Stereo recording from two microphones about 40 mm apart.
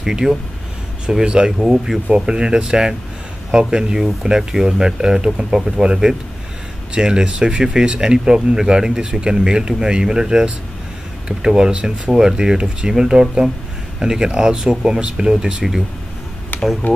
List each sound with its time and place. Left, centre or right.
0.0 s speech: centre
1.6 s speech: centre
2.1 s speech: centre
5.5 s speech: centre
6.9 s speech: centre
16.8 s speech: left